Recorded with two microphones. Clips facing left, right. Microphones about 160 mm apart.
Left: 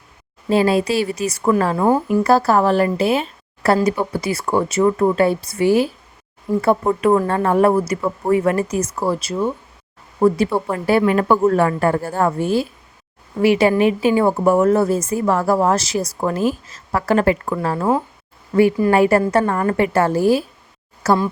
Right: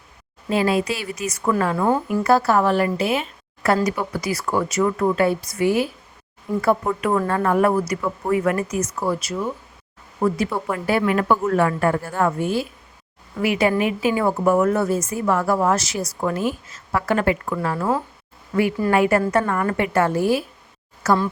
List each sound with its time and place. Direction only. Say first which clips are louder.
0.5 s speech: left 5 dB; 30° left (ahead or behind)